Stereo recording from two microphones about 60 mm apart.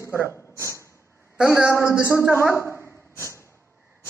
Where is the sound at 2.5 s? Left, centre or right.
Left.